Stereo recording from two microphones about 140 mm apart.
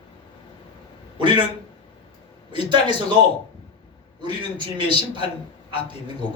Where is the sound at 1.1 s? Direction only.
35° right (ahead or behind).